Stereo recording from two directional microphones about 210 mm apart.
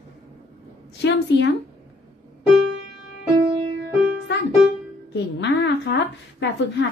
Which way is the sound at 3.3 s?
25° right (ahead or behind).